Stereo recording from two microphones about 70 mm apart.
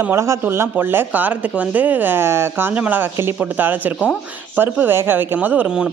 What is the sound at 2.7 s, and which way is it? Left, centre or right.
Speech, right.